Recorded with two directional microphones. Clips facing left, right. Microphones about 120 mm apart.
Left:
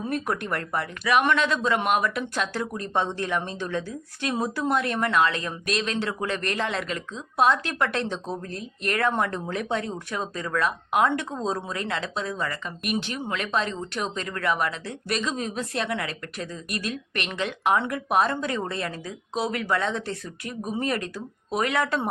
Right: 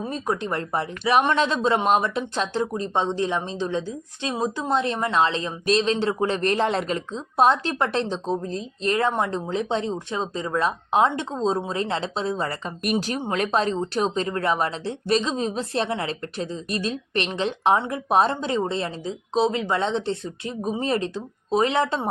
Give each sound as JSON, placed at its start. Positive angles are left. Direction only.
{"t": 0.4, "sound": "speech", "side_deg": -25}